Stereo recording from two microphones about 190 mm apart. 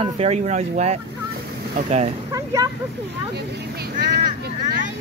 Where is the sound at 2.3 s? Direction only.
20° right (ahead or behind).